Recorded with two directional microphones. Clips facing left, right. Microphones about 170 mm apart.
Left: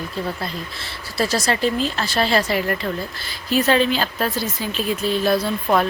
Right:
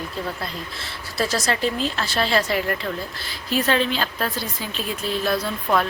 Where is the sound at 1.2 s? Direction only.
Centre (ahead or behind).